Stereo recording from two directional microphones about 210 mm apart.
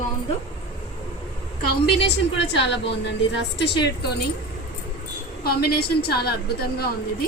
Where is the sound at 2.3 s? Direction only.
55° left (ahead or behind).